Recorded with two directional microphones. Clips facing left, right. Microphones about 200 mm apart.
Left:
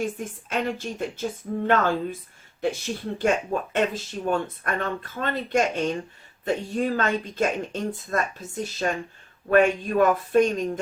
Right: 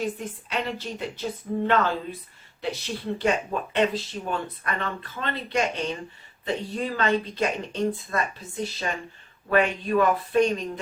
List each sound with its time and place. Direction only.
0.2 s speech: 50° left (ahead or behind)